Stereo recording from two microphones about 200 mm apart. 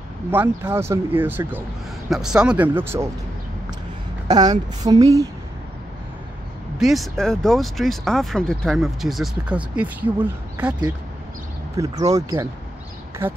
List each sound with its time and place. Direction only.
0.3 s speech: 10° right (ahead or behind)
4.3 s speech: 20° right (ahead or behind)
6.8 s speech: centre (ahead or behind)
11.7 s speech: 15° right (ahead or behind)